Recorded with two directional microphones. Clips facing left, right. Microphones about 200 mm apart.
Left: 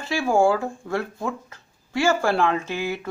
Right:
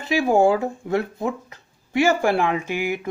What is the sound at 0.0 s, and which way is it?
Speech, 20° right (ahead or behind).